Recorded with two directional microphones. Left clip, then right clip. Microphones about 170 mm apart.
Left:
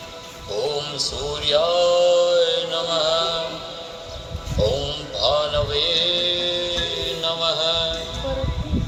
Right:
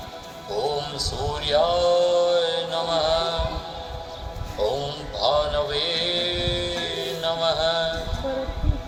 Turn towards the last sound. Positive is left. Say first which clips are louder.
# left 1 dB
turn(degrees=-25)  # may be behind; listen again after turning